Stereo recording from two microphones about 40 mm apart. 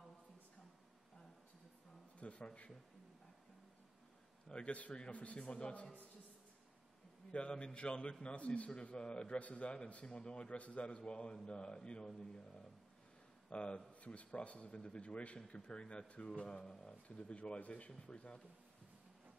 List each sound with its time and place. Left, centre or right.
2.1 s a man's voice: left
4.5 s a man's voice: left
7.3 s a man's voice: left
13.5 s a man's voice: left
16.4 s speech: centre
17.1 s a man's voice: left